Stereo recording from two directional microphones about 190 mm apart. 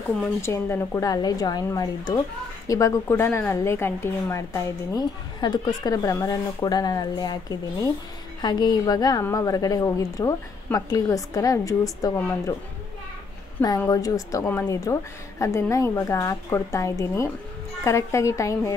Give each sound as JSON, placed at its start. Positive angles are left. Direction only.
{"t": 0.2, "sound": "a woman's voice", "side_deg": 15}
{"t": 13.6, "sound": "a woman's voice", "side_deg": 15}